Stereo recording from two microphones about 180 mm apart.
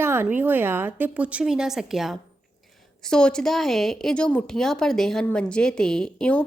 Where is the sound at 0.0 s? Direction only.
15° right (ahead or behind).